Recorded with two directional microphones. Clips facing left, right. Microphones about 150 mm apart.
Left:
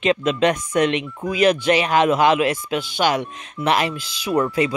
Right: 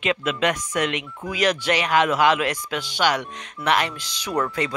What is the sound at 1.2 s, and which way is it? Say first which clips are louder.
Speech: left 5 dB; 20° left (ahead or behind).